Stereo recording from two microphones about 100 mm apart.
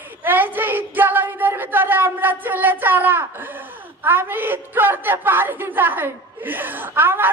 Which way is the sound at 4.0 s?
20° right (ahead or behind).